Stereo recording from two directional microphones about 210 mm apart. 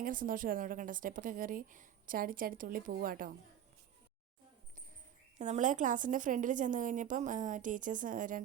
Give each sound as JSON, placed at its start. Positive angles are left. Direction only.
{"t": 0.0, "sound": "a woman's voice", "side_deg": -40}
{"t": 5.4, "sound": "a woman's voice", "side_deg": -35}